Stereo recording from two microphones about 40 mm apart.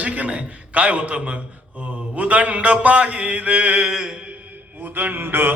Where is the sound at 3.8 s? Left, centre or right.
Centre.